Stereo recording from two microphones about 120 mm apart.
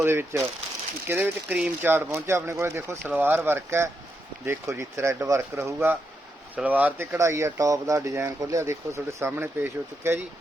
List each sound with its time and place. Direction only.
0.0 s speech: 20° right (ahead or behind)